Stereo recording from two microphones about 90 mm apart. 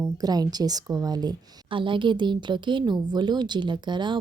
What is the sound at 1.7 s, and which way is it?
A woman's voice, 65° right (ahead or behind).